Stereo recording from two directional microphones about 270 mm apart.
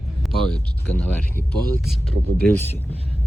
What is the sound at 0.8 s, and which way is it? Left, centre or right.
Speech, centre.